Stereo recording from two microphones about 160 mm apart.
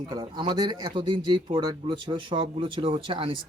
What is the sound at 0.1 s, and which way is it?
A man's voice, 30° right (ahead or behind).